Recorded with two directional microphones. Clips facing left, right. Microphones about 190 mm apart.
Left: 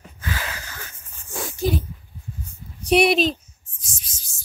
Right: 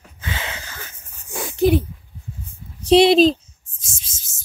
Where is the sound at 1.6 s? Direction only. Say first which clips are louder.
Right 8 dB; 60° right (ahead or behind).